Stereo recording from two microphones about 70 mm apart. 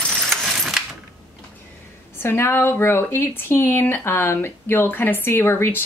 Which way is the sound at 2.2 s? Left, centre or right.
Left.